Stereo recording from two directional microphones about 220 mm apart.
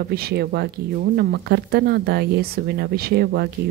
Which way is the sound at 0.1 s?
45° right (ahead or behind).